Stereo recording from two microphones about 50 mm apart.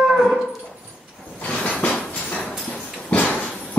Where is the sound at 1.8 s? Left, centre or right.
Left.